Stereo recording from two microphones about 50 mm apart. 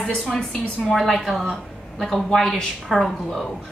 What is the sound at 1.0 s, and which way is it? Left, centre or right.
A woman's voice, centre.